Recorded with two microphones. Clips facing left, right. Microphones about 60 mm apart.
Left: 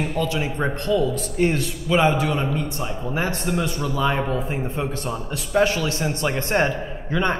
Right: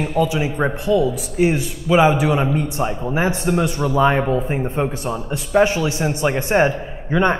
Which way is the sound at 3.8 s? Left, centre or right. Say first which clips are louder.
Right 8 dB; right.